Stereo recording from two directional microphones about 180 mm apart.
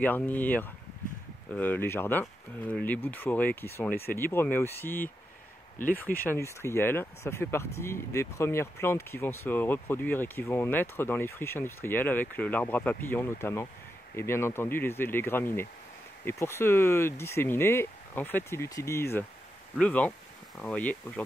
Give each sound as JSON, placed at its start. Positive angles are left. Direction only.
{"t": 0.0, "sound": "speech", "side_deg": 10}
{"t": 5.8, "sound": "speech", "side_deg": 50}
{"t": 6.2, "sound": "speech", "side_deg": 15}